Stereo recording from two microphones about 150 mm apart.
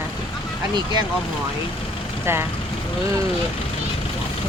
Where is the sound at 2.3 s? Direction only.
15° right (ahead or behind).